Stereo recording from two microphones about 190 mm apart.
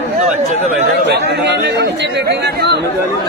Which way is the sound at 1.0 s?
60° right (ahead or behind).